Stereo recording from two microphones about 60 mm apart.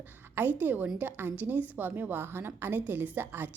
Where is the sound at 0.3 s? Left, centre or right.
Right.